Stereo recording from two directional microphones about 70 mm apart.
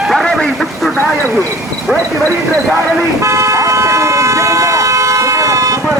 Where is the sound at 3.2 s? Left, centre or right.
Right.